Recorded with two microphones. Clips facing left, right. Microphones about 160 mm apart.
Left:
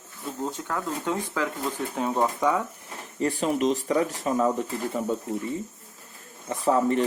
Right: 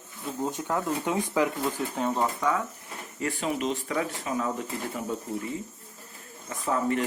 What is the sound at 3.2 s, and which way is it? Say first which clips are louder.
Speech: left 5 dB; 35° left (ahead or behind).